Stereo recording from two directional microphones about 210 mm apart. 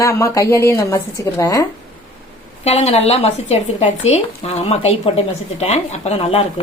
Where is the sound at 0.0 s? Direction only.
15° left (ahead or behind).